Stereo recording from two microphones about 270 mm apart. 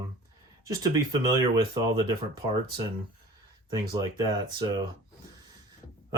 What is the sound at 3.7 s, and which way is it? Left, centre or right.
Speech, centre.